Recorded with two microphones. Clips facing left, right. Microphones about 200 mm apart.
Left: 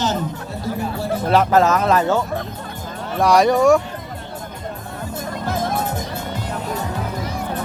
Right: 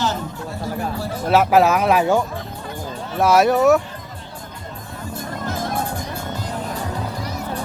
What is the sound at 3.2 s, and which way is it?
Speech, 5° right (ahead or behind).